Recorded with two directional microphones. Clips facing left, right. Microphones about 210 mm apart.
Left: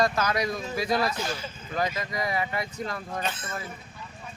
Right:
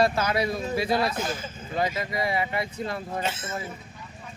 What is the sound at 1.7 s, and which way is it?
Speech, 20° right (ahead or behind).